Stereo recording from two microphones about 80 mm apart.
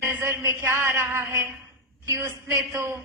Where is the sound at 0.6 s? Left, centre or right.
Right.